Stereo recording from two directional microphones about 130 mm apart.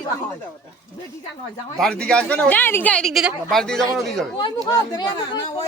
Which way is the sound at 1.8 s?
5° left (ahead or behind).